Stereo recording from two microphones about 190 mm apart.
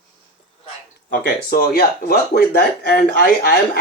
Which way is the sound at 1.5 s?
55° left (ahead or behind).